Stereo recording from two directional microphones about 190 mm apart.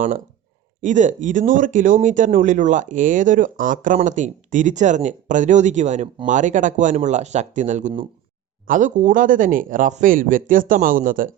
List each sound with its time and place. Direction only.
0.8 s speech: 40° right (ahead or behind)